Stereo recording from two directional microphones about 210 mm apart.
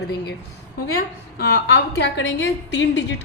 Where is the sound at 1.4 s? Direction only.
50° left (ahead or behind).